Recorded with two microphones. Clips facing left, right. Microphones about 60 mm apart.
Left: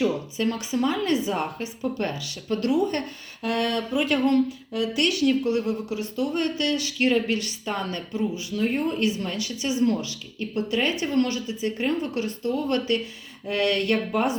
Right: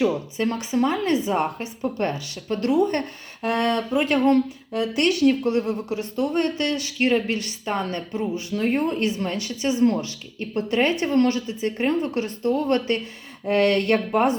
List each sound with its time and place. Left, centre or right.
0.3 s speech: right